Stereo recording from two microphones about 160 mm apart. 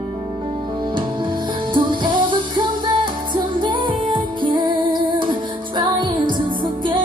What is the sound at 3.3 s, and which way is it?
Music, 30° right (ahead or behind).